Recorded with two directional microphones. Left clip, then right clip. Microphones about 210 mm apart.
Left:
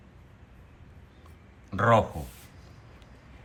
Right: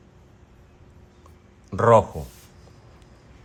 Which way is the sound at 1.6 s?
40° right (ahead or behind).